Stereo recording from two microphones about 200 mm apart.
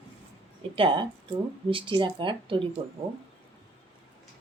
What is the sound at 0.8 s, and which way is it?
Speech, 25° right (ahead or behind).